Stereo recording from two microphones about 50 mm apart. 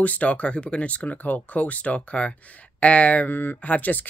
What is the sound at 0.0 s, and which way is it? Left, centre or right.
Speech, left.